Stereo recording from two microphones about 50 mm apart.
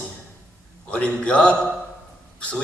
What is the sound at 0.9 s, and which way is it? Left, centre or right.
Speech, left.